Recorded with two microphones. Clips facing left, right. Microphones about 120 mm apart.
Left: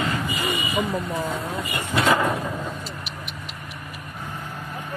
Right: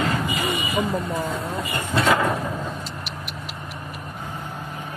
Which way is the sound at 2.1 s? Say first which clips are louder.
Even; centre (ahead or behind).